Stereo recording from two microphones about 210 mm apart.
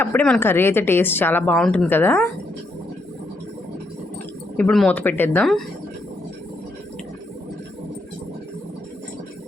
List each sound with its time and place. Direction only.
0.0 s a woman's voice: 10° left (ahead or behind)
4.5 s speech: 5° left (ahead or behind)